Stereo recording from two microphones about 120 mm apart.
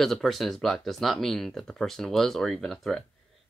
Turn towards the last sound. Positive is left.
turn(degrees=5)  # may be behind; listen again after turning